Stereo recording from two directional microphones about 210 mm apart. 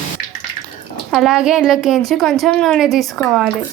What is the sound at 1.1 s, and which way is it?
A woman's voice, centre (ahead or behind).